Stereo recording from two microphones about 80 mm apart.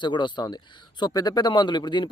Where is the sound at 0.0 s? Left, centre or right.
Left.